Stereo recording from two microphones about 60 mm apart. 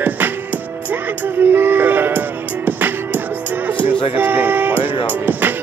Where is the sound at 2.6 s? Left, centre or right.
Right.